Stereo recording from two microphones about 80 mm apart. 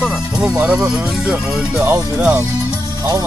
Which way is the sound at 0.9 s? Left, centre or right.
Centre.